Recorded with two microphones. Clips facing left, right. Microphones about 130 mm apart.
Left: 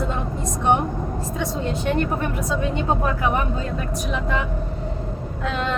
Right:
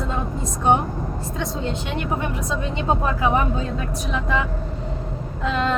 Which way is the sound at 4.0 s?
Centre (ahead or behind).